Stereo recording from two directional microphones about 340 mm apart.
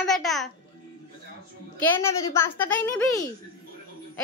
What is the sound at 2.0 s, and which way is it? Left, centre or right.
A woman's voice, centre.